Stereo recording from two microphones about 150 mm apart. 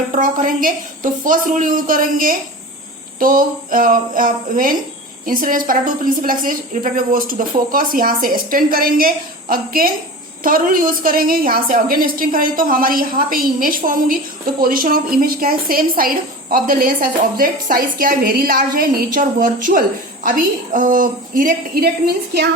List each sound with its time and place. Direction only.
0.1 s a woman's voice: 60° right (ahead or behind); by 22.4 s 85° right